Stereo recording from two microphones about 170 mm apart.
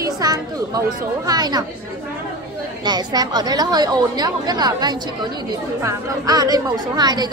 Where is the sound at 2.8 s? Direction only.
25° right (ahead or behind).